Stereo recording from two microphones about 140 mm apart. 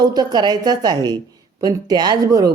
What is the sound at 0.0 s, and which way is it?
A man's voice, 30° right (ahead or behind).